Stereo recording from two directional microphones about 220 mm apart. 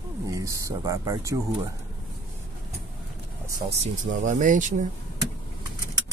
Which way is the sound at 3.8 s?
35° right (ahead or behind).